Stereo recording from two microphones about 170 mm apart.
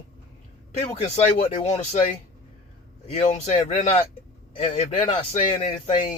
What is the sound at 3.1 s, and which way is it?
A man's voice, 40° left (ahead or behind).